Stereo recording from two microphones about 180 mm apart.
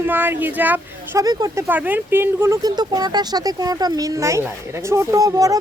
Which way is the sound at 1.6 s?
10° right (ahead or behind).